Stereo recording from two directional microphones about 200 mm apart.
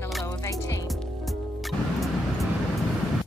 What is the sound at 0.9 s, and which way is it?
Music, centre (ahead or behind).